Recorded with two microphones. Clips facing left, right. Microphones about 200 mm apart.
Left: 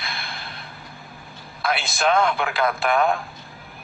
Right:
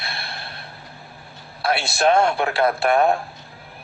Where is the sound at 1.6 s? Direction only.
35° right (ahead or behind).